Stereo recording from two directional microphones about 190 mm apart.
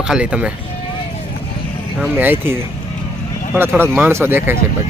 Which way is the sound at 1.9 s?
10° right (ahead or behind).